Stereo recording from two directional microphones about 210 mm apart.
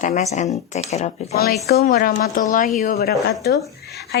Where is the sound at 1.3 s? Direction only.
45° left (ahead or behind).